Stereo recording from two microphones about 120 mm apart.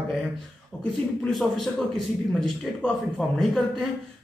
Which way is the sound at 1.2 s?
Centre (ahead or behind).